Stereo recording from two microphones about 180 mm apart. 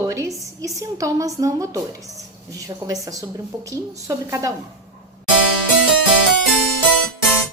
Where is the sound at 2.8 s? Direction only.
20° right (ahead or behind).